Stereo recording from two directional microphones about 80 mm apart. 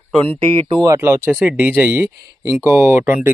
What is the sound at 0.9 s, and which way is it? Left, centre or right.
Speech, right.